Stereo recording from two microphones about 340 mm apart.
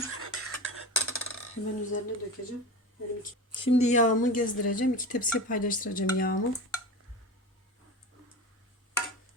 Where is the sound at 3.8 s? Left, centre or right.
Left.